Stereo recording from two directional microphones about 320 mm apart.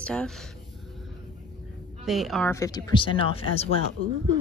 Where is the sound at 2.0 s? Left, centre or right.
Centre.